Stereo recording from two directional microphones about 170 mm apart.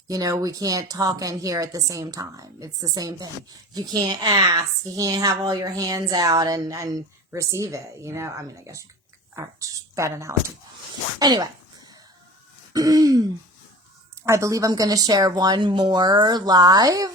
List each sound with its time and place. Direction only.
0.1 s a woman's voice: 20° right (ahead or behind)
12.7 s throat clearing: 20° right (ahead or behind)
14.3 s a woman's voice: 15° right (ahead or behind)